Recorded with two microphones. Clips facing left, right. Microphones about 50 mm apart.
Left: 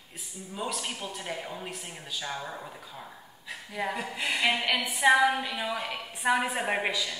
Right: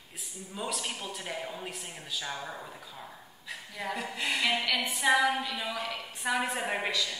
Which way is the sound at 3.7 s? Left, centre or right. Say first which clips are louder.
Left 4 dB; centre.